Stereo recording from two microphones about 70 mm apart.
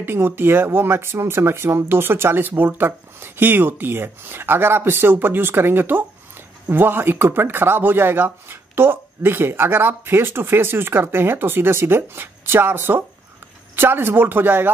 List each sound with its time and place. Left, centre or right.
0.0 s speech: right